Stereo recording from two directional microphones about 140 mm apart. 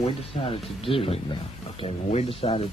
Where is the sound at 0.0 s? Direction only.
40° left (ahead or behind).